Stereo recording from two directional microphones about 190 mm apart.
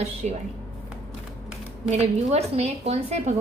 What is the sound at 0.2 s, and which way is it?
Speech, 40° right (ahead or behind).